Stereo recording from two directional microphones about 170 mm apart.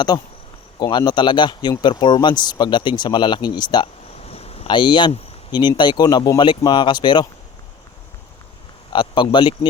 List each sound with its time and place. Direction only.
0.8 s speech: 25° left (ahead or behind)
4.3 s speech: 35° left (ahead or behind)
8.9 s speech: 30° left (ahead or behind)